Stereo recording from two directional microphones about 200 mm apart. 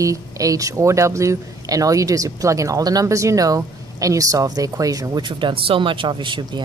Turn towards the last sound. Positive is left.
turn(degrees=-25)  # may be behind; listen again after turning